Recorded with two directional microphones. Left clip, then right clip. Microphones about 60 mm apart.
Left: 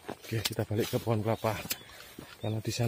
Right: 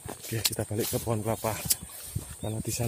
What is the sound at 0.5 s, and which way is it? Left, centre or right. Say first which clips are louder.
Speech: even; centre.